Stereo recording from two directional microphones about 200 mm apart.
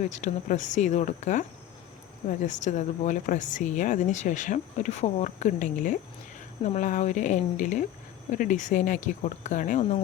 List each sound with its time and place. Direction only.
0.0 s speech: 35° left (ahead or behind)